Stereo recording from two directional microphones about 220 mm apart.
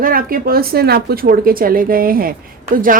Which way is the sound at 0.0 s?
40° right (ahead or behind).